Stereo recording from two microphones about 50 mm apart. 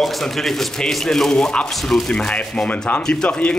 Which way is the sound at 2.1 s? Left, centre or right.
Centre.